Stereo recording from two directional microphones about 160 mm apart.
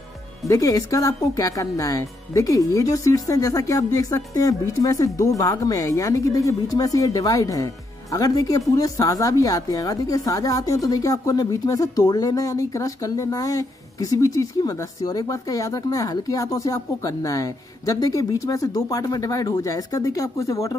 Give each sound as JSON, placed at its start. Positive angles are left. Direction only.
{"t": 0.5, "sound": "speech", "side_deg": 20}